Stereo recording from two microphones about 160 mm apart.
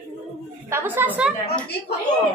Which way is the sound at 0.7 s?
15° right (ahead or behind).